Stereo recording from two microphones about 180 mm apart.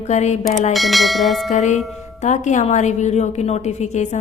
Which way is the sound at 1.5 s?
40° left (ahead or behind).